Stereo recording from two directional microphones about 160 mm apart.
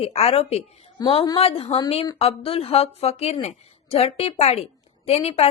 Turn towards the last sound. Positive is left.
turn(degrees=40)  # may be behind; listen again after turning